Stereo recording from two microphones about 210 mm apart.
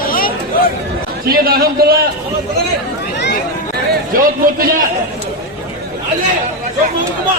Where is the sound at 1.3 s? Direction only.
45° right (ahead or behind).